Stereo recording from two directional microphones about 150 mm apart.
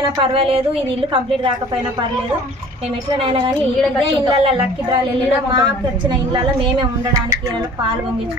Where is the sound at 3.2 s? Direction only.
40° right (ahead or behind).